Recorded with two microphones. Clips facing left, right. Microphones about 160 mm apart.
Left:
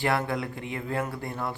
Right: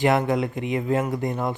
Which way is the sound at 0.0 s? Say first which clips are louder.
Right 7 dB; 20° right (ahead or behind).